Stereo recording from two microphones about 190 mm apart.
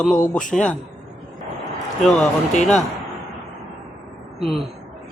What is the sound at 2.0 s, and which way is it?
Speech, 5° left (ahead or behind).